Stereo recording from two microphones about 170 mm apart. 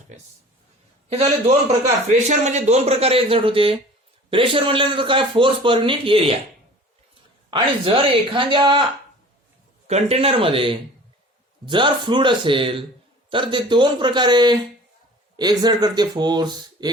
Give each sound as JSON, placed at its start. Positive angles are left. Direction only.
{"t": 1.1, "sound": "a man's voice", "side_deg": -35}
{"t": 7.5, "sound": "a man's voice", "side_deg": -30}
{"t": 9.8, "sound": "a man's voice", "side_deg": -40}